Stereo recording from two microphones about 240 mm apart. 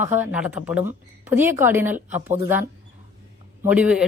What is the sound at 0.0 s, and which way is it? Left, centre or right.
A woman's voice, centre.